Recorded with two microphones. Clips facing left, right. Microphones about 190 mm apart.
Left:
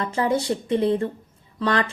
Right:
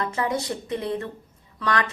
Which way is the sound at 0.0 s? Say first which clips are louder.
Left 3 dB; 30° left (ahead or behind).